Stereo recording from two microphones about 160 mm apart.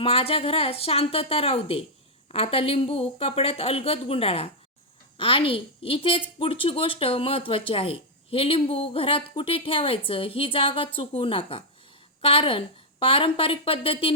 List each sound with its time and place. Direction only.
0.0 s a woman's voice: 35° left (ahead or behind)